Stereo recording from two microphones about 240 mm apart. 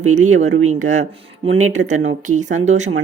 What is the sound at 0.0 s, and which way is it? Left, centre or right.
Speech, right.